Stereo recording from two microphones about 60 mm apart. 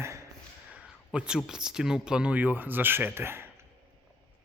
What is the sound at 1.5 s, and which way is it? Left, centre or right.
Speech, centre.